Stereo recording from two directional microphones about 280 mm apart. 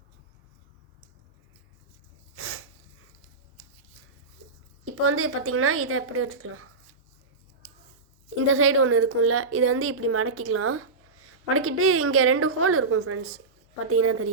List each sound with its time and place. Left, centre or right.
2.3 s sneeze: right
4.9 s a woman's voice: right
8.4 s a woman's voice: right